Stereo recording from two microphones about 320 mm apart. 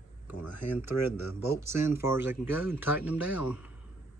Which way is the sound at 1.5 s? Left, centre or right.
Centre.